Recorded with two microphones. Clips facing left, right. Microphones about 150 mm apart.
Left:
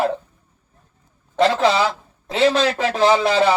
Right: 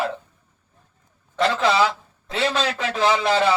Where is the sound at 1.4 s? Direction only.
40° left (ahead or behind).